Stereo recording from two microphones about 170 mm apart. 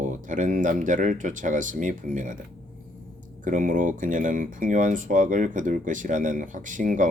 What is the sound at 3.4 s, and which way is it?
Speech, 50° right (ahead or behind).